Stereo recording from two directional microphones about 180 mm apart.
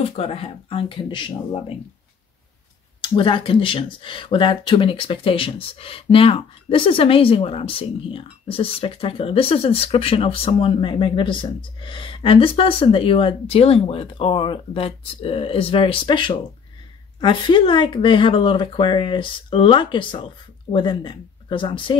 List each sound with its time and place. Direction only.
0.0 s speech: 35° left (ahead or behind)
3.0 s speech: 30° left (ahead or behind)